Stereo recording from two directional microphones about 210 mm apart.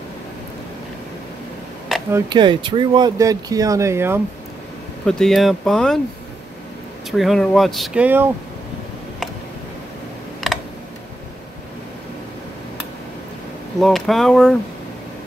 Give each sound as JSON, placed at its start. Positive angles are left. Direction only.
{"t": 2.0, "sound": "speech", "side_deg": -15}
{"t": 5.0, "sound": "speech", "side_deg": 0}
{"t": 7.1, "sound": "speech", "side_deg": 0}
{"t": 10.4, "sound": "computer keyboard", "side_deg": 0}
{"t": 13.7, "sound": "speech", "side_deg": 0}